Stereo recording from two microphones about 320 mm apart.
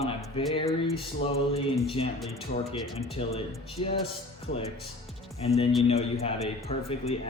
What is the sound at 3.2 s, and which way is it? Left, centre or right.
Speech, centre.